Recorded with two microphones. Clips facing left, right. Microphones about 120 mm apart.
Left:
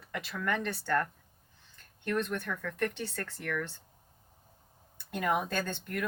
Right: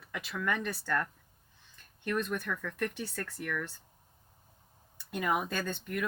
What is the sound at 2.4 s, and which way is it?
Speech, 50° left (ahead or behind).